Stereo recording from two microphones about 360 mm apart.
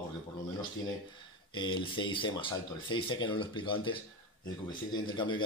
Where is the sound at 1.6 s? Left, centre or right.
Centre.